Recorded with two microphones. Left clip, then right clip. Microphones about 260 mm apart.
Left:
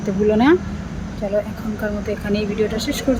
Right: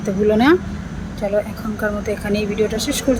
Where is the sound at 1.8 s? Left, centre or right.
Centre.